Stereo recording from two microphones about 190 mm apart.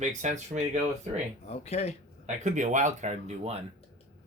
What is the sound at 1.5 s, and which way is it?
Speech, 35° left (ahead or behind).